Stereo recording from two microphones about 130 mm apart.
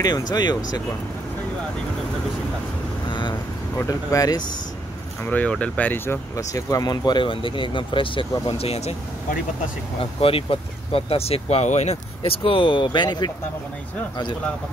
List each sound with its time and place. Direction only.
0.3 s speech: 30° left (ahead or behind)
3.1 s vehicle: 35° left (ahead or behind)
3.7 s speech: 25° left (ahead or behind)
5.2 s speech: 10° left (ahead or behind)
6.3 s speech: 25° left (ahead or behind); by 8.9 s 50° left (ahead or behind)
9.9 s speech: 45° left (ahead or behind)
12.2 s speech: 45° left (ahead or behind)